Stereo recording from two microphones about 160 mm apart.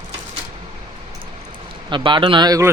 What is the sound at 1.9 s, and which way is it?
Speech, 30° right (ahead or behind).